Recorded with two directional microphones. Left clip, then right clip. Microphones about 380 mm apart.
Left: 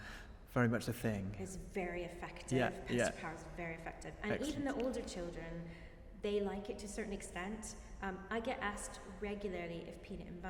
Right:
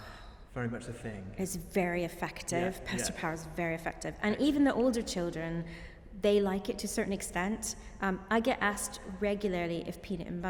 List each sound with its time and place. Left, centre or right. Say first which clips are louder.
0.5 s a man's voice: left 3 dB; left
1.4 s a woman's voice: right 10 dB; right